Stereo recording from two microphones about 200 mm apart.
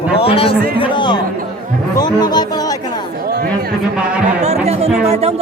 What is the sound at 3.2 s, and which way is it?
Chatter, 50° right (ahead or behind).